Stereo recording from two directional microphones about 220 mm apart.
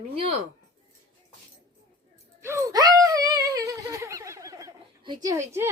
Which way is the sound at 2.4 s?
10° right (ahead or behind).